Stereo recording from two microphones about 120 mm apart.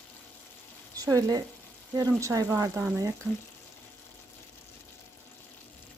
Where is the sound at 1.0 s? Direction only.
30° right (ahead or behind).